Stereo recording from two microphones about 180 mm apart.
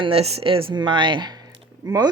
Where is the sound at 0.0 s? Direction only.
35° right (ahead or behind).